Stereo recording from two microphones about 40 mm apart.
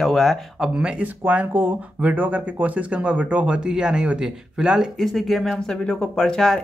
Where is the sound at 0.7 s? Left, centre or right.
Right; by 4.8 s centre.